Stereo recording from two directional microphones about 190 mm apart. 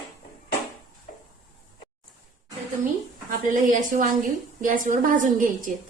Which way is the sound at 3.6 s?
45° right (ahead or behind).